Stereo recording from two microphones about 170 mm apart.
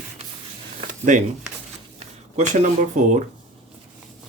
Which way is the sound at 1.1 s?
45° right (ahead or behind).